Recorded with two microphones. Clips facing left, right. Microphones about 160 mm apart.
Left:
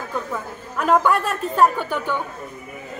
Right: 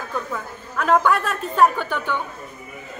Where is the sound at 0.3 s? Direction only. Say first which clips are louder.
Left 1 dB; 5° left (ahead or behind).